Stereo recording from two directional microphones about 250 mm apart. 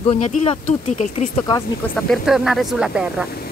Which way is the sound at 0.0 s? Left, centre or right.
Left.